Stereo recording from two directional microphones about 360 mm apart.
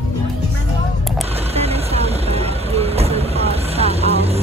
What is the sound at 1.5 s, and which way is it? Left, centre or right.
Vehicle, centre.